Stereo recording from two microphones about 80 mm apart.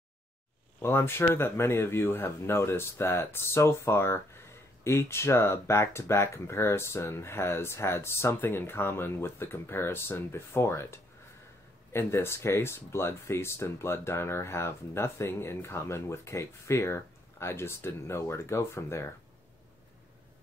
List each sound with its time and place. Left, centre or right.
0.7 s speech: left